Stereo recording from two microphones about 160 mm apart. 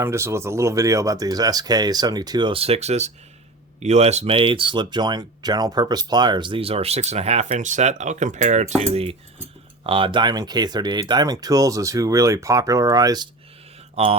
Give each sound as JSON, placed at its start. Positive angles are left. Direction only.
{"t": 0.0, "sound": "speech", "side_deg": -15}
{"t": 13.9, "sound": "speech", "side_deg": -40}